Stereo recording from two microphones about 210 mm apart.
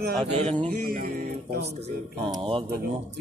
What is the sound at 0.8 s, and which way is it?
Speech, 40° right (ahead or behind).